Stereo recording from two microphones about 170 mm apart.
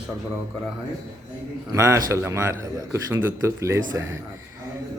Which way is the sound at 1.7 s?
15° right (ahead or behind).